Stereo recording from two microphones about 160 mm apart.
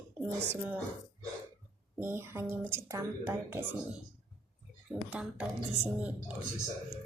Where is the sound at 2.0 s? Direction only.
15° right (ahead or behind).